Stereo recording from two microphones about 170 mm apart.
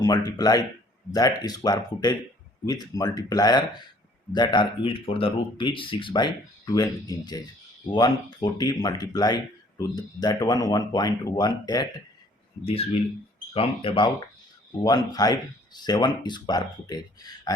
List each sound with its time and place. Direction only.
0.0 s speech: 20° left (ahead or behind)
12.6 s speech: 35° left (ahead or behind)